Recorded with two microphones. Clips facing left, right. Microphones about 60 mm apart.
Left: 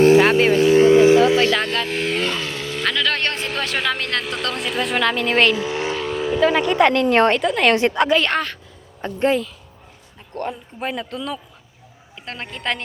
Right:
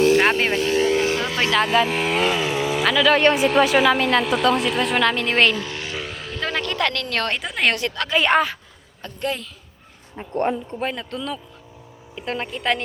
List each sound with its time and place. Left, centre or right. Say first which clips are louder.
0.2 s speech: left 4 dB; centre
0.8 s speech: left 11 dB; left
1.5 s speech: right 2 dB; centre
5.6 s vehicle: left 8 dB; centre
6.0 s speech: left 14 dB; centre; by 7.3 s left
7.3 s speech: left 5 dB; centre
7.8 s speech: left 8 dB; left
8.1 s speech: right 1 dB; centre
9.0 s speech: left 7 dB; left
10.7 s speech: even; centre